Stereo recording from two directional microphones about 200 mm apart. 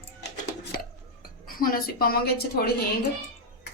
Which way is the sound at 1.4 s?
45° left (ahead or behind).